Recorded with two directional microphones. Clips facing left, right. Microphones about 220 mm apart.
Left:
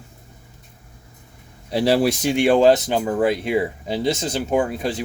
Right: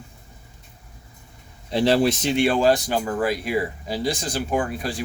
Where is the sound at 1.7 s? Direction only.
5° left (ahead or behind).